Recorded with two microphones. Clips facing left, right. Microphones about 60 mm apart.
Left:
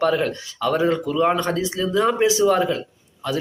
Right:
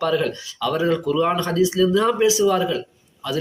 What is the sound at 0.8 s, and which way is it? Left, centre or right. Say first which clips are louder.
Speech: right 1 dB; left.